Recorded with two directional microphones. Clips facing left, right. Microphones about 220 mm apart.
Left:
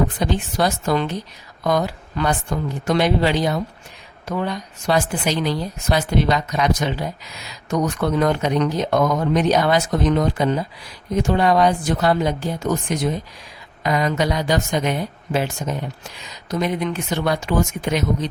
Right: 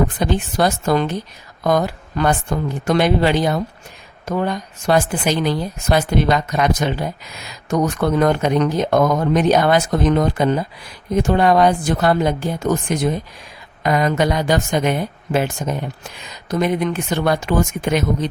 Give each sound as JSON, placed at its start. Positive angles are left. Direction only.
{"t": 0.2, "sound": "speech", "side_deg": -50}